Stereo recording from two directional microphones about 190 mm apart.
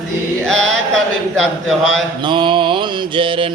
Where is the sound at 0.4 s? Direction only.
5° left (ahead or behind).